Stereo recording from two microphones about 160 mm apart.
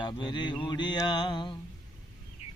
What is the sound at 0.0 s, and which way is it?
Mantra, 30° left (ahead or behind).